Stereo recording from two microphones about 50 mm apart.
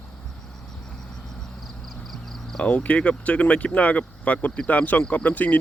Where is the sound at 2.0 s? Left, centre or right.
Centre.